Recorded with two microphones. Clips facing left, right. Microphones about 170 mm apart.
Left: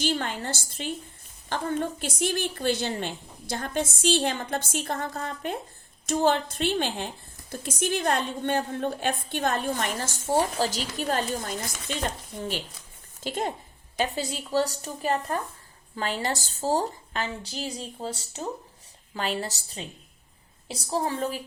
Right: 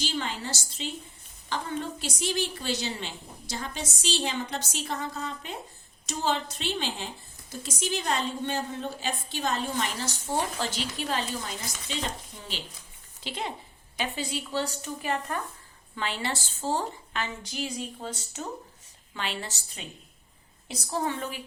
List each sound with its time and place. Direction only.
0.0 s a woman's voice: 55° left (ahead or behind); by 21.4 s 35° left (ahead or behind)